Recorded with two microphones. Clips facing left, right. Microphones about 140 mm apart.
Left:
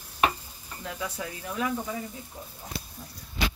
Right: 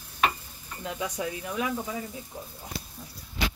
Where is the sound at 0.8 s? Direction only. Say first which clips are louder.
Right 3 dB; 20° right (ahead or behind).